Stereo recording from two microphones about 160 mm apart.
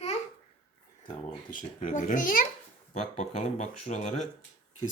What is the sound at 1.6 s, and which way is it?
Speech, 55° left (ahead or behind).